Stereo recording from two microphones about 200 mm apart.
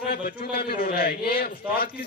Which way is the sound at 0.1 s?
50° left (ahead or behind).